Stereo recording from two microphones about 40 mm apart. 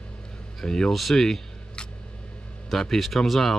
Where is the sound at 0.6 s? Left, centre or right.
Centre.